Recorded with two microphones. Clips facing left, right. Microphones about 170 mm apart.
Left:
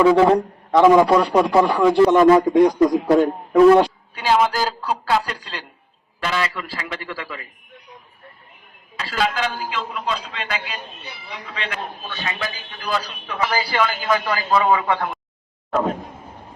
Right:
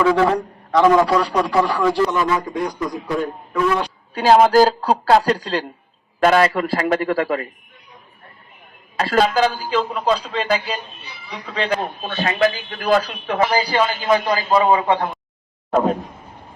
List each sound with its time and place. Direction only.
0.0 s a man's voice: 20° left (ahead or behind)
2.0 s a man's voice: 45° left (ahead or behind)
4.1 s a man's voice: 40° right (ahead or behind)
9.0 s a man's voice: 45° right (ahead or behind)
13.7 s a man's voice: 30° right (ahead or behind)